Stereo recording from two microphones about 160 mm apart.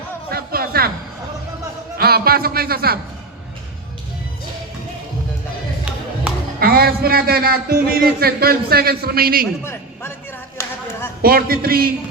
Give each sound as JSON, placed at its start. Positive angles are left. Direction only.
{"t": 0.3, "sound": "music", "side_deg": -70}
{"t": 2.0, "sound": "a man's voice", "side_deg": -75}
{"t": 6.6, "sound": "a man's voice", "side_deg": -70}
{"t": 11.2, "sound": "a man's voice", "side_deg": -70}